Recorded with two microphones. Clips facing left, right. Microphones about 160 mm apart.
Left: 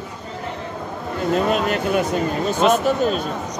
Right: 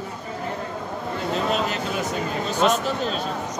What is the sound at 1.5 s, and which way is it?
Speech, 60° left (ahead or behind).